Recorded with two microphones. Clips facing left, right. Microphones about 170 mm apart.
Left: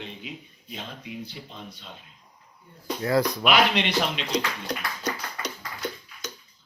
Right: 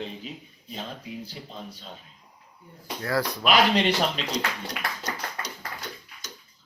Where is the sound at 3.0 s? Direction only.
20° left (ahead or behind).